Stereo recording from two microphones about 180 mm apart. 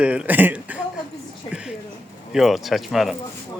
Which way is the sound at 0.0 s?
5° right (ahead or behind).